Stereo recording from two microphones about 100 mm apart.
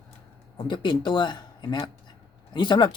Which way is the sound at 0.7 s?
50° left (ahead or behind).